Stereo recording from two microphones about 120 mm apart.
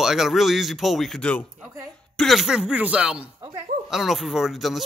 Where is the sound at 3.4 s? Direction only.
35° right (ahead or behind).